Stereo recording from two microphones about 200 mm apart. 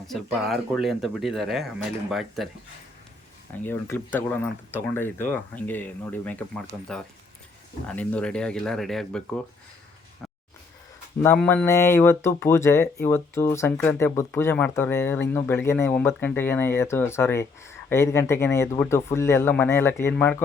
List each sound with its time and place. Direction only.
0.1 s speech: centre (ahead or behind)
3.6 s speech: 10° left (ahead or behind)
11.3 s speech: 10° left (ahead or behind)